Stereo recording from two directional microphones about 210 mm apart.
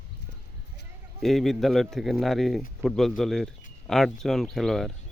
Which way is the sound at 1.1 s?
Centre (ahead or behind).